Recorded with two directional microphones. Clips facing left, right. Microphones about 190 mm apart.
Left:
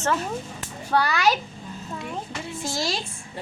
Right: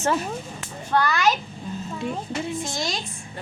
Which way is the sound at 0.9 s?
10° left (ahead or behind).